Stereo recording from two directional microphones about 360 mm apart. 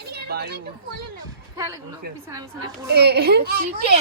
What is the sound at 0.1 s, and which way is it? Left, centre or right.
Children playing, right.